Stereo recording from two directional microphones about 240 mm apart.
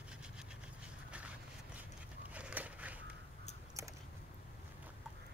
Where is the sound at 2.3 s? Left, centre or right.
Centre.